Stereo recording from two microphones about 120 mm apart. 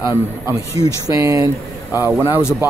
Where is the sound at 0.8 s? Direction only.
30° right (ahead or behind).